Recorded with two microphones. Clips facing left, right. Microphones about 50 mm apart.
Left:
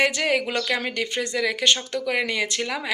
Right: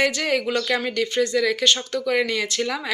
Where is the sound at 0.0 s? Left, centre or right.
Centre.